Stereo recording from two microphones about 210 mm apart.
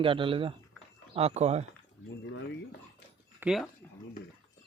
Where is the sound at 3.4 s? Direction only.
Centre (ahead or behind).